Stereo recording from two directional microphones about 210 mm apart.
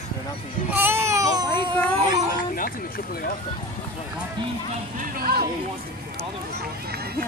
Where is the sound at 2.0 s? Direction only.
40° left (ahead or behind).